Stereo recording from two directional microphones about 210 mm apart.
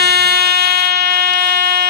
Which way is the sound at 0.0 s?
50° right (ahead or behind).